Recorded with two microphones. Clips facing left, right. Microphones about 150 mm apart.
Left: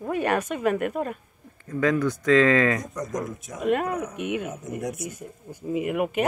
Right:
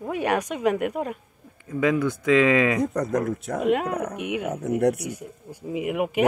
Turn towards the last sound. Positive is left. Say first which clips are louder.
# right 1 dB
turn(degrees=-10)  # may be behind; listen again after turning